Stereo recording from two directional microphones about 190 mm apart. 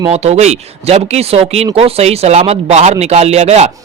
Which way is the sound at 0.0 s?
35° right (ahead or behind).